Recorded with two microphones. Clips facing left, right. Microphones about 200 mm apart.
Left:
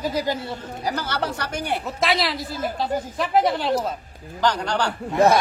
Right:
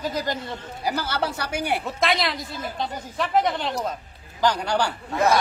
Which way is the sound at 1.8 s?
Centre (ahead or behind).